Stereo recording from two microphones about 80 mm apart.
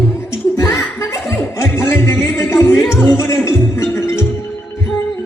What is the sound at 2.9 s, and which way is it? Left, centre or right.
Music, left.